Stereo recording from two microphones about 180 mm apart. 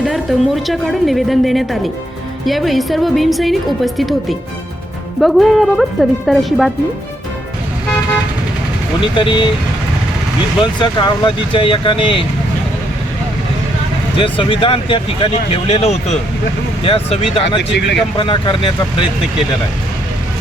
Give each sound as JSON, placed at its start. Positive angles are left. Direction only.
{"t": 0.0, "sound": "a woman's voice", "side_deg": 0}
{"t": 9.1, "sound": "speech", "side_deg": 25}
{"t": 10.6, "sound": "speech", "side_deg": 25}
{"t": 14.2, "sound": "speech", "side_deg": 30}
{"t": 17.6, "sound": "speech", "side_deg": 75}
{"t": 18.2, "sound": "speech", "side_deg": 30}